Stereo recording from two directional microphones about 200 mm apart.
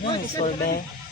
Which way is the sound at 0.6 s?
50° left (ahead or behind).